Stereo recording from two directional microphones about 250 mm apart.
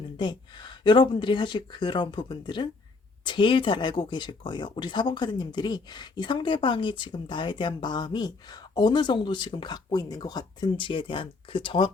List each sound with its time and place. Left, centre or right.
0.2 s speech: centre